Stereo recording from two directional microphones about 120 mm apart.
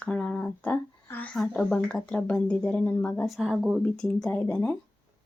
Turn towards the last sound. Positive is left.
turn(degrees=10)  # may be behind; listen again after turning